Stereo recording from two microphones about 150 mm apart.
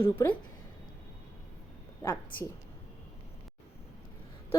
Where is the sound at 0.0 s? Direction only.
15° left (ahead or behind).